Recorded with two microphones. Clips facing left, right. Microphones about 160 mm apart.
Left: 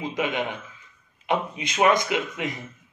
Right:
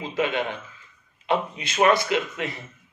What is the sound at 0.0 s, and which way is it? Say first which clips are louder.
A man's voice: right 1 dB; 15° left (ahead or behind).